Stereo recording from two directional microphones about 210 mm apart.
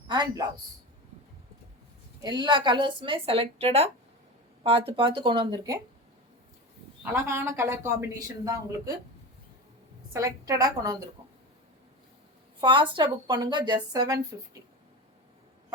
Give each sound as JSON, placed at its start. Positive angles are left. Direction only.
{"t": 0.1, "sound": "a woman's voice", "side_deg": -20}
{"t": 2.2, "sound": "a woman's voice", "side_deg": -20}
{"t": 7.0, "sound": "speech", "side_deg": -10}
{"t": 10.1, "sound": "speech", "side_deg": -15}
{"t": 12.5, "sound": "a woman's voice", "side_deg": -25}